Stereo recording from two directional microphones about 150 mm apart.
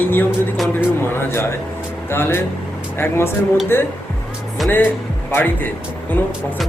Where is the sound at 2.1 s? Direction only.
15° left (ahead or behind).